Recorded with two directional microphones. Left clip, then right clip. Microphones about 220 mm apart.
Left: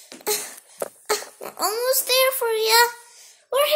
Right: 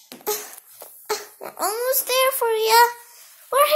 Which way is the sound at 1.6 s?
Centre (ahead or behind).